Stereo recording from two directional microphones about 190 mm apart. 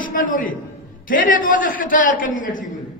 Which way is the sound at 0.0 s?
45° left (ahead or behind).